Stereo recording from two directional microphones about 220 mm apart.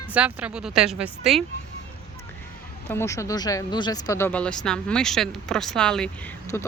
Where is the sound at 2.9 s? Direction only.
10° left (ahead or behind).